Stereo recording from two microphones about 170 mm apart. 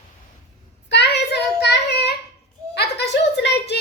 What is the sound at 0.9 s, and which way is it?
Child singing, 90° left.